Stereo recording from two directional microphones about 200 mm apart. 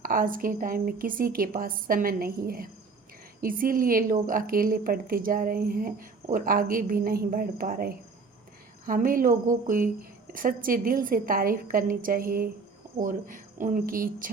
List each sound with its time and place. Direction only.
0.0 s a woman's voice: 45° right (ahead or behind)